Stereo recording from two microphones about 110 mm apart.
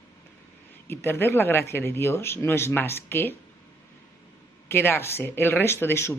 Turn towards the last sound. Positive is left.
turn(degrees=20)  # may be behind; listen again after turning